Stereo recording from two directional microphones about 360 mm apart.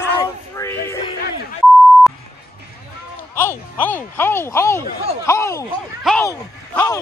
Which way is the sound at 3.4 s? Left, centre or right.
Centre.